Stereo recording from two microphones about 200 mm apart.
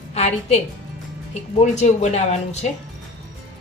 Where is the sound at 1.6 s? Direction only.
35° left (ahead or behind).